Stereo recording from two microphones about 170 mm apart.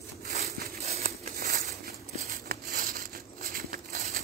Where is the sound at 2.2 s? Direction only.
55° right (ahead or behind).